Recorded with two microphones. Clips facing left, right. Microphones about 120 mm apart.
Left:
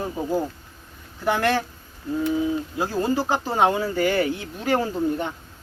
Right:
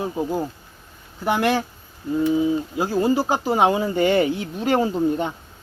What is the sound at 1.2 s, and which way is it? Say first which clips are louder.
Speech: right 1 dB; 15° right (ahead or behind).